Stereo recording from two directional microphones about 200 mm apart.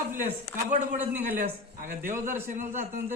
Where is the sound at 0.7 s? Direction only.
40° right (ahead or behind).